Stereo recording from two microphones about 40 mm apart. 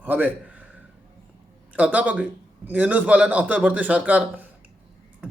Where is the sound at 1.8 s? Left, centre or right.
Right.